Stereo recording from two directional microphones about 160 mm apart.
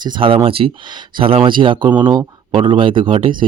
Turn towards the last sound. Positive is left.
turn(degrees=-35)  # may be behind; listen again after turning